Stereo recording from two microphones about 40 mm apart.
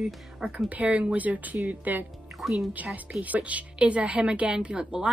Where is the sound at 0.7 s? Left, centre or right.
Right.